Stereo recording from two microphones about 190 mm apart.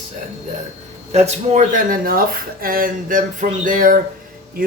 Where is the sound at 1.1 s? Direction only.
35° right (ahead or behind).